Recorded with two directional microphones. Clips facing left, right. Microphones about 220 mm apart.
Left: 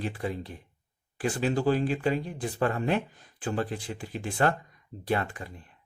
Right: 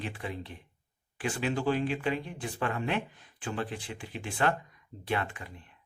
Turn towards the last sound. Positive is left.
turn(degrees=40)  # may be behind; listen again after turning